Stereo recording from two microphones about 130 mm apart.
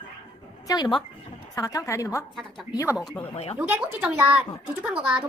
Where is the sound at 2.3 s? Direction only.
Centre (ahead or behind).